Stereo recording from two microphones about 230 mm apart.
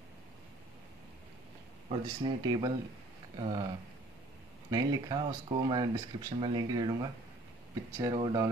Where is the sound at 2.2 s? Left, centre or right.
Centre.